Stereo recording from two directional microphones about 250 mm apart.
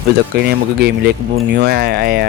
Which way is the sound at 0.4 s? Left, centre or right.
Right.